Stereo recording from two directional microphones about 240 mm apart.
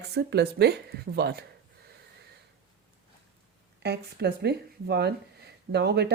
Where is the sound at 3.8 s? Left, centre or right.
Right.